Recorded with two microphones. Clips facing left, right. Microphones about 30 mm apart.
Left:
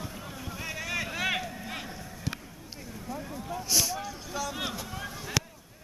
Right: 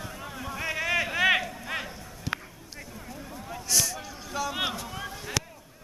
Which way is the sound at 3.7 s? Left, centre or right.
Centre.